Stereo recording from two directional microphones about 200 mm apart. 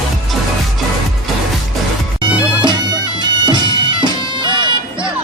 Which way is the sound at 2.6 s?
25° right (ahead or behind).